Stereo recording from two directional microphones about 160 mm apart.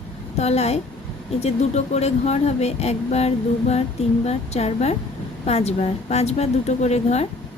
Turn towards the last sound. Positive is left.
turn(degrees=40)  # may be behind; listen again after turning